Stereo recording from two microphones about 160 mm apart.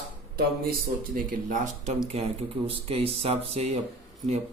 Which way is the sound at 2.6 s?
35° right (ahead or behind).